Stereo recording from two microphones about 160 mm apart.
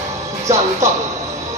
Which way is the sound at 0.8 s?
20° right (ahead or behind).